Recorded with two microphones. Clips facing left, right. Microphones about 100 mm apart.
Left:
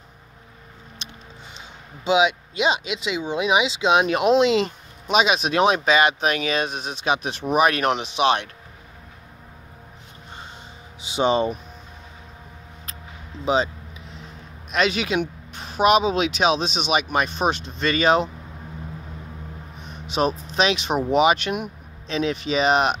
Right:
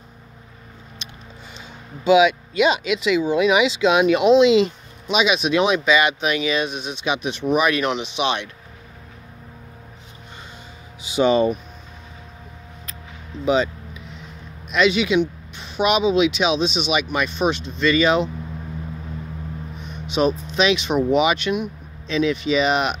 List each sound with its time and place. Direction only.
2.0 s speech: 25° left (ahead or behind)
4.1 s speech: 45° left (ahead or behind)
11.0 s speech: 30° left (ahead or behind)
13.5 s vehicle: 30° left (ahead or behind)
14.7 s speech: 40° left (ahead or behind)
19.8 s speech: 40° left (ahead or behind)